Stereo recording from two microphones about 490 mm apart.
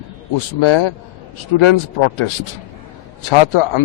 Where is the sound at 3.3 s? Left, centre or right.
Left.